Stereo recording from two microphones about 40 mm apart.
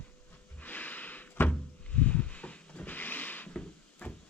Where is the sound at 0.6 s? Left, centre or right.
Left.